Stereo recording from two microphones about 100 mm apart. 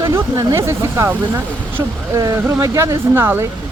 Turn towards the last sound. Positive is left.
turn(degrees=-20)  # may be behind; listen again after turning